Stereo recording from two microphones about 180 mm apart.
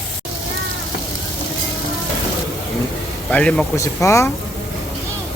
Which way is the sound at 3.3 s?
5° left (ahead or behind).